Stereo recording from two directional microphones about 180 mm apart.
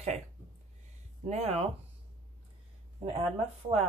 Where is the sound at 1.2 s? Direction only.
35° right (ahead or behind).